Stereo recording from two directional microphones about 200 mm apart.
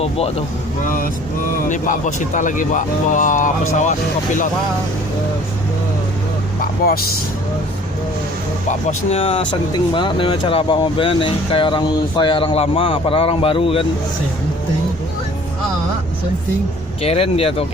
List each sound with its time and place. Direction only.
0.0 s speech: 30° left (ahead or behind)
1.7 s speech: 40° left (ahead or behind)
6.8 s speech: 50° left (ahead or behind)
8.9 s speech: 30° left (ahead or behind)
17.0 s speech: 30° left (ahead or behind)